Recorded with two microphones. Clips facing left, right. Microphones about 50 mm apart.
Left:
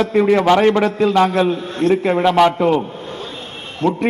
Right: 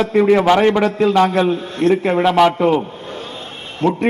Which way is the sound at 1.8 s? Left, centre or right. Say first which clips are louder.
Right 1 dB; right.